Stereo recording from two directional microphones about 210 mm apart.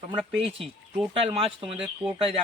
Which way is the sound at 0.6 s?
5° right (ahead or behind).